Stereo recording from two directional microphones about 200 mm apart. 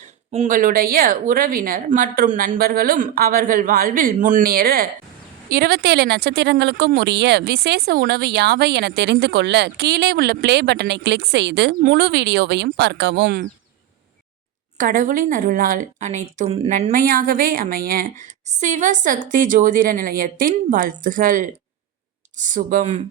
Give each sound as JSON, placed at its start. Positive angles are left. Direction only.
{"t": 0.3, "sound": "a woman's voice", "side_deg": -35}
{"t": 11.8, "sound": "speech", "side_deg": -45}
{"t": 14.8, "sound": "a woman's voice", "side_deg": -45}
{"t": 22.4, "sound": "speech", "side_deg": -40}